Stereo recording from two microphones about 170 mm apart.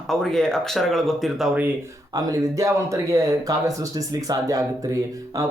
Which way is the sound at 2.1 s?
20° right (ahead or behind).